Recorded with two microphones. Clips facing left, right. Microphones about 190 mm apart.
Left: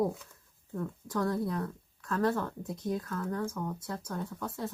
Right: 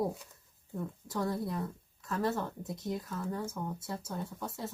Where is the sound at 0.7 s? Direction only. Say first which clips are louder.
Left 3 dB; 15° right (ahead or behind).